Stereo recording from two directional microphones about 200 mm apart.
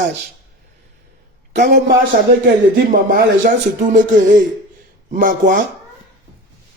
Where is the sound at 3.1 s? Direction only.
40° right (ahead or behind).